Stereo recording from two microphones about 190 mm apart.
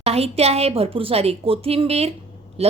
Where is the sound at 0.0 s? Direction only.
35° right (ahead or behind).